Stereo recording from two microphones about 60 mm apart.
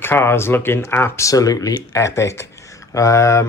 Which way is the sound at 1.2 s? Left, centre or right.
Left.